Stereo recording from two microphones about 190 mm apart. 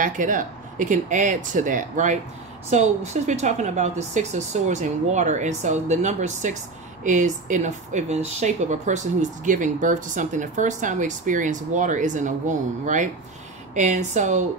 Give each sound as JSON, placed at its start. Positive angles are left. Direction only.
{"t": 0.0, "sound": "speech", "side_deg": -45}